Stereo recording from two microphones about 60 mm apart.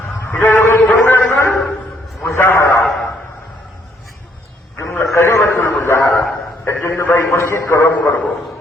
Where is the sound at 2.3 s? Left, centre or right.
Left.